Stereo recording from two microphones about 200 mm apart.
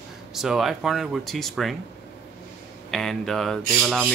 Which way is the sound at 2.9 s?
Centre (ahead or behind).